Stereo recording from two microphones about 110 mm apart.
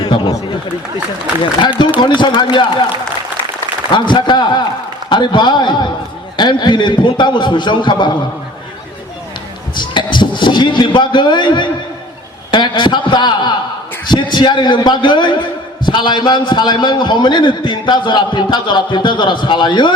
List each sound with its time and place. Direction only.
0.0 s a sound: 40° left (ahead or behind)
2.0 s a man's voice: 45° left (ahead or behind)
3.9 s a man's voice: 45° left (ahead or behind)
9.7 s a man's voice: 45° left (ahead or behind)